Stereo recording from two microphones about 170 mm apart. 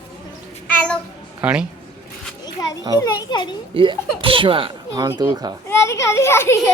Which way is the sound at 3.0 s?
25° left (ahead or behind).